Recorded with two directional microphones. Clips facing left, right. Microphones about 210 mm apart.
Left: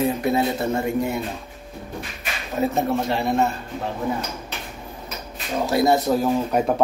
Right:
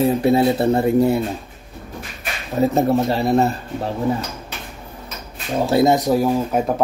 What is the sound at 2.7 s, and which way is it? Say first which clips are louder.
Speech: right 5 dB; 35° right (ahead or behind).